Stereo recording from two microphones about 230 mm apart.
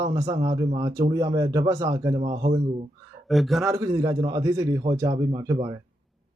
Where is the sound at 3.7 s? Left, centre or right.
Centre.